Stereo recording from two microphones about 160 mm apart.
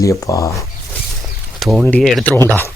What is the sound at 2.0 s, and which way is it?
Speech, centre (ahead or behind).